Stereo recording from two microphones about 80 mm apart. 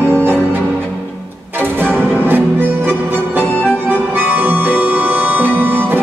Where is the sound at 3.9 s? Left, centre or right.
Right.